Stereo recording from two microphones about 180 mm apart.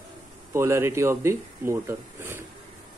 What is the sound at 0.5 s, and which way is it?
Speech, 15° right (ahead or behind).